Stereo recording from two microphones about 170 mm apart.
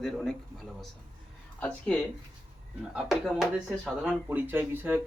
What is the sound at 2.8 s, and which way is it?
Speech, 5° right (ahead or behind).